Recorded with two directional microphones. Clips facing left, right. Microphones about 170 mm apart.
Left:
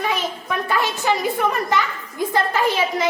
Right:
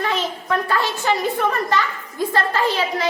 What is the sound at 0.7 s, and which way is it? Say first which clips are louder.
A woman's voice: left 3 dB; 15° left (ahead or behind).